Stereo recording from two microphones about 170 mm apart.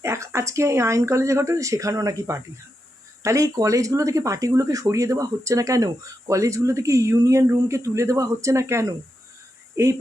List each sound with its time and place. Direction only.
0.0 s speech: 15° right (ahead or behind)